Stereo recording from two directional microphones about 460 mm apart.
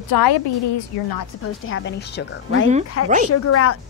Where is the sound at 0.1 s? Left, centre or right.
Left.